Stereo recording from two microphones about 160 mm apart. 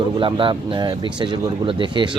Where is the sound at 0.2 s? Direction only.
30° right (ahead or behind).